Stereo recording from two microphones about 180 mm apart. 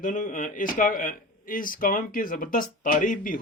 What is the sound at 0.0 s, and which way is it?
Speech, 45° left (ahead or behind).